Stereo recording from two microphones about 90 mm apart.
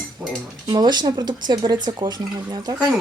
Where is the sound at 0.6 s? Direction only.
50° right (ahead or behind).